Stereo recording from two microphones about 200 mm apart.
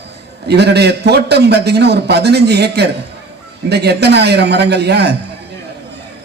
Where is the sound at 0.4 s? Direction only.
55° right (ahead or behind).